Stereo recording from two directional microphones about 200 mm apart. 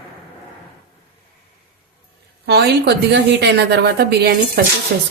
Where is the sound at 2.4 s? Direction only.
55° right (ahead or behind).